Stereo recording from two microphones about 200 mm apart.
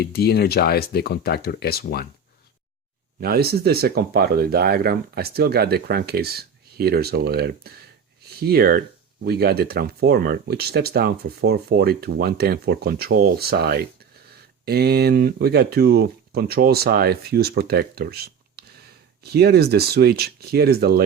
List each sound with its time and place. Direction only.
0.0 s speech: 55° left (ahead or behind)
3.2 s speech: 50° right (ahead or behind)